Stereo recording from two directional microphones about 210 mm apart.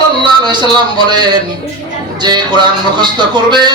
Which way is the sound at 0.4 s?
20° right (ahead or behind).